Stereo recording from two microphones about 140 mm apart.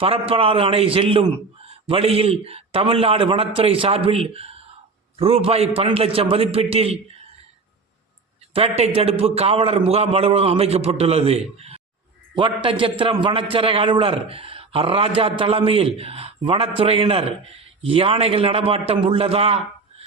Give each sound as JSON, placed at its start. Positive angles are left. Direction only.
{"t": 0.0, "sound": "a man's voice", "side_deg": -40}
{"t": 8.5, "sound": "a man's voice", "side_deg": -45}
{"t": 12.3, "sound": "a man's voice", "side_deg": -35}